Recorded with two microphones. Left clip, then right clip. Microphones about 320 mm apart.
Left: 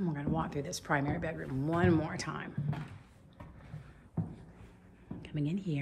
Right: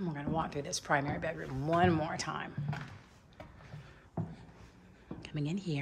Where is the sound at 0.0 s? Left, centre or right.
Centre.